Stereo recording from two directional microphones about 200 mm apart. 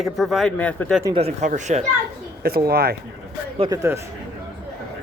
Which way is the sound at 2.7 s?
50° right (ahead or behind).